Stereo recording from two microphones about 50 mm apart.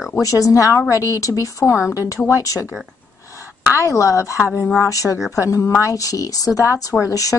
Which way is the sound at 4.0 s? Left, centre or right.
Left.